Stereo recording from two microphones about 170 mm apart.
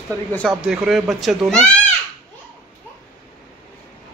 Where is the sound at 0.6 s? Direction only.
5° right (ahead or behind).